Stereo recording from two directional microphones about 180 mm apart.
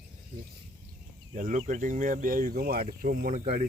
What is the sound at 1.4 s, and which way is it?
Speech, 45° right (ahead or behind).